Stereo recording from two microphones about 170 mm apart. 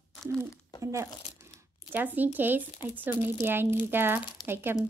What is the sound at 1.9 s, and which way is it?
Speech, 10° right (ahead or behind).